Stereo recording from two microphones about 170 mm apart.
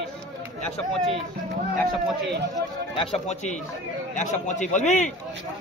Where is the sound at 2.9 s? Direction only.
40° left (ahead or behind).